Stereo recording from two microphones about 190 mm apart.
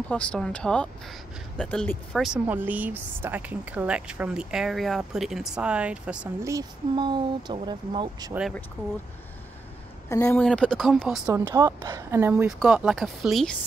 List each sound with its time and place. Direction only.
0.1 s speech: 5° left (ahead or behind)
6.5 s speech: 25° right (ahead or behind)
8.3 s speech: 5° right (ahead or behind)
10.0 s speech: 15° left (ahead or behind)
11.3 s a woman's voice: 15° right (ahead or behind); by 13.6 s centre (ahead or behind)